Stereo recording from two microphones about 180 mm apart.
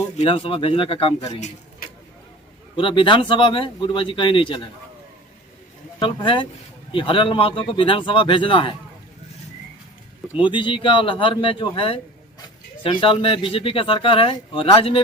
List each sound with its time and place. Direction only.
0.2 s speech: 30° left (ahead or behind)
2.7 s speech: 30° left (ahead or behind)
6.0 s speech: 25° left (ahead or behind)
10.4 s speech: 25° left (ahead or behind)